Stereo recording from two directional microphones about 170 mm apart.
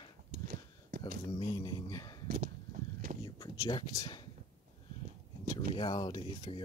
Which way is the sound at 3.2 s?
25° left (ahead or behind).